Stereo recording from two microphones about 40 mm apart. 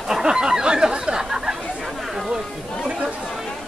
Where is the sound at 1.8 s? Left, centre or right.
Centre.